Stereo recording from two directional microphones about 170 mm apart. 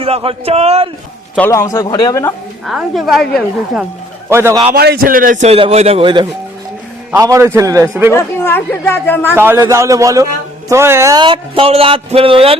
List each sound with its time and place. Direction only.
0.0 s a man's voice: 35° right (ahead or behind)
1.4 s a man's voice: 20° left (ahead or behind)
2.6 s a woman's voice: centre (ahead or behind)
4.3 s a man's voice: 15° right (ahead or behind)
4.7 s a man's voice: 65° right (ahead or behind); by 6.2 s 30° right (ahead or behind)
7.1 s a man's voice: 15° right (ahead or behind)
8.1 s speech: 15° left (ahead or behind)
9.3 s a man's voice: 15° right (ahead or behind); by 12.5 s 35° right (ahead or behind)